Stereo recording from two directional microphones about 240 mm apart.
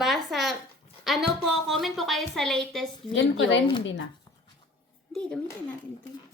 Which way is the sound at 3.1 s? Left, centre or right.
Left.